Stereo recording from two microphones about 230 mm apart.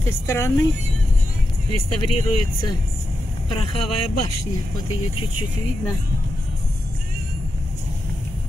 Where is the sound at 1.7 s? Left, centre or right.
Left.